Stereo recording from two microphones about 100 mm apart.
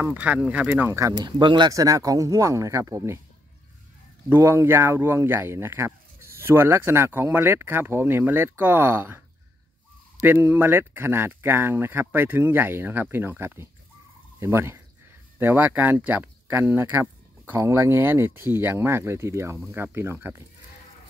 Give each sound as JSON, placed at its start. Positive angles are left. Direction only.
{"t": 0.0, "sound": "speech", "side_deg": -15}
{"t": 1.2, "sound": "speech", "side_deg": -50}
{"t": 1.7, "sound": "speech", "side_deg": -35}
{"t": 4.3, "sound": "speech", "side_deg": -25}
{"t": 10.2, "sound": "speech", "side_deg": -20}